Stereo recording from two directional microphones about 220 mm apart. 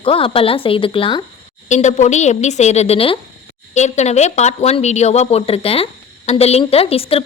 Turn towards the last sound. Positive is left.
turn(degrees=25)  # may be behind; listen again after turning